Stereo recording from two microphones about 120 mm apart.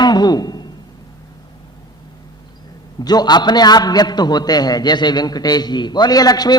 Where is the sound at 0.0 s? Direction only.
35° left (ahead or behind).